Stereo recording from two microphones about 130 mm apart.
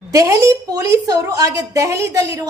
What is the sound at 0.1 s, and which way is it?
A woman's voice, 25° right (ahead or behind).